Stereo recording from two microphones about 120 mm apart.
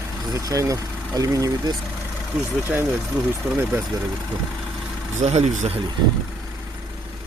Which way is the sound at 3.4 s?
15° right (ahead or behind).